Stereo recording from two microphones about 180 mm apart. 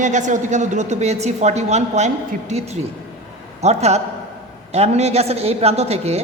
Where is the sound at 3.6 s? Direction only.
35° right (ahead or behind).